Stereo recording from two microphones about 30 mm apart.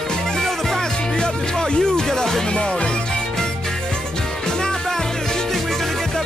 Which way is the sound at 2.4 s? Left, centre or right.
Left.